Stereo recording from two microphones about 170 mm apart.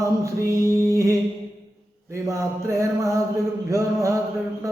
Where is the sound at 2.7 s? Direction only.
20° right (ahead or behind).